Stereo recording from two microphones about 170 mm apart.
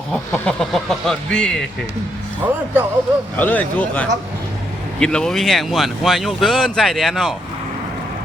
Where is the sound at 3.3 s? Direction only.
10° left (ahead or behind).